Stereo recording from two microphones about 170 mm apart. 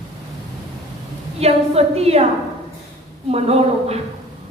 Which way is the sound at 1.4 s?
35° right (ahead or behind).